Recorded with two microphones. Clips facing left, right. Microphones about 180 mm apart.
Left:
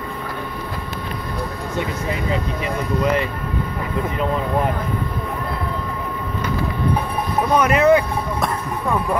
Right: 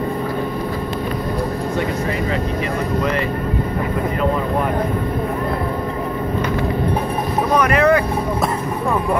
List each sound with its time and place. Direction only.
7.5 s speech: 5° left (ahead or behind)